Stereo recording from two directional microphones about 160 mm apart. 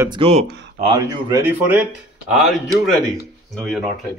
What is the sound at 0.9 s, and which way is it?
Speech, 20° right (ahead or behind).